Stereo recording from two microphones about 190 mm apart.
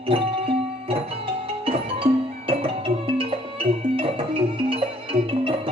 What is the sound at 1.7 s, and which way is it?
Music, 30° right (ahead or behind).